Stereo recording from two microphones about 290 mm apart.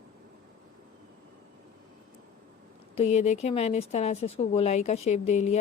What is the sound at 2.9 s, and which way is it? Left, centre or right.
Speech, left.